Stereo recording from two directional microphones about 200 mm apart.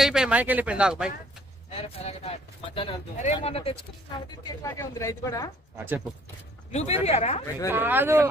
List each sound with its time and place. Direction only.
0.0 s a man's voice: 5° right (ahead or behind)
1.8 s speech: 30° left (ahead or behind)
4.4 s speech: 15° left (ahead or behind)
6.7 s speech: 30° left (ahead or behind)
7.7 s speech: 10° right (ahead or behind)